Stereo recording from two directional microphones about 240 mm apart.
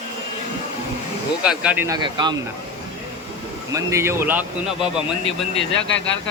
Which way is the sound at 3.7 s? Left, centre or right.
Centre.